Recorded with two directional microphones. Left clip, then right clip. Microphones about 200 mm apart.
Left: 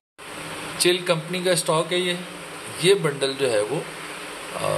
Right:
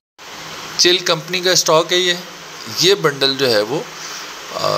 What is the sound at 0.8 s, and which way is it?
A man's voice, 25° right (ahead or behind).